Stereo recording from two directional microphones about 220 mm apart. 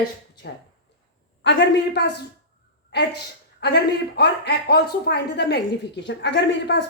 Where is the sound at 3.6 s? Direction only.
50° left (ahead or behind).